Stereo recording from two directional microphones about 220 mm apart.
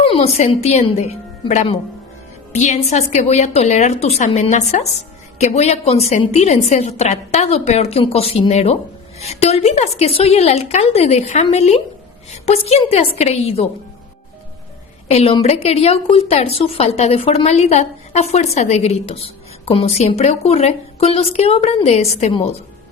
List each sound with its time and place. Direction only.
0.0 s a woman's voice: 25° left (ahead or behind)
15.0 s a woman's voice: 30° left (ahead or behind)